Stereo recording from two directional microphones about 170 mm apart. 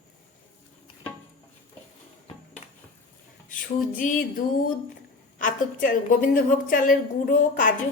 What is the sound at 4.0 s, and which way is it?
A woman's voice, 50° left (ahead or behind).